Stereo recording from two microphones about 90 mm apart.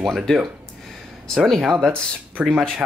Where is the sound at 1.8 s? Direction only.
25° right (ahead or behind).